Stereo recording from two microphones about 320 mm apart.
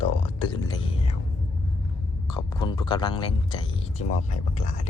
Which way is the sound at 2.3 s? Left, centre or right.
Centre.